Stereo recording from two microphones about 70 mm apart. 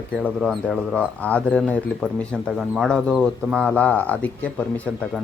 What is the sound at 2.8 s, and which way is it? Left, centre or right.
Speech, centre.